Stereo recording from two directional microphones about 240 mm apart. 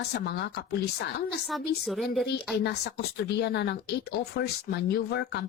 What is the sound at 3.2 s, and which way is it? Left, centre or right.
A woman's voice, left.